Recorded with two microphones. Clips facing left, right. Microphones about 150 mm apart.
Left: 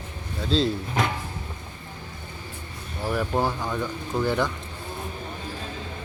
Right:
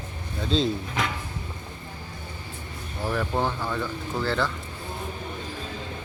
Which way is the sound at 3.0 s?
5° left (ahead or behind).